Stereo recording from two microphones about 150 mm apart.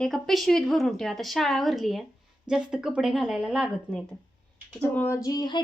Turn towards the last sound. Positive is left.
turn(degrees=30)  # may be behind; listen again after turning